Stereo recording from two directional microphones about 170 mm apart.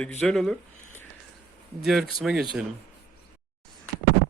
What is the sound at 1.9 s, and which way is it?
Speech, centre (ahead or behind).